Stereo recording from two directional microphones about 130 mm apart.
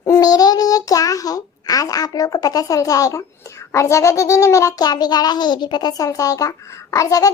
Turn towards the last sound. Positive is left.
turn(degrees=25)  # may be behind; listen again after turning